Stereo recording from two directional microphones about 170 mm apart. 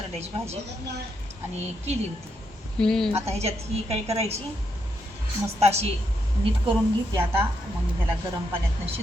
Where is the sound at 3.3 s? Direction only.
40° right (ahead or behind).